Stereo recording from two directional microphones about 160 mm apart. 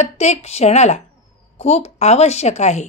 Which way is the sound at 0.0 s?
45° left (ahead or behind).